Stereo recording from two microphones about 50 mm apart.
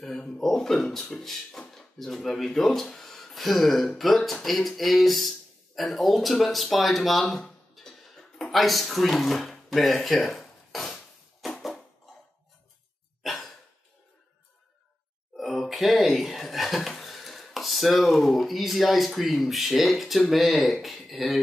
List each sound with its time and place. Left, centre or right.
0.0 s speech: centre
7.8 s cough: centre
8.5 s speech: centre
10.2 s dishes: centre
13.2 s sigh: centre
15.3 s a sound: centre
20.2 s speech: centre